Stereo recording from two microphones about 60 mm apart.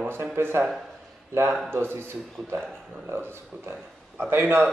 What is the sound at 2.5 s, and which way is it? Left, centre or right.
Speech, right.